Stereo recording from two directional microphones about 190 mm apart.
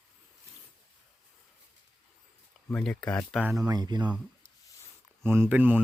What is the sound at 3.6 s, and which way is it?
Speech, 20° right (ahead or behind).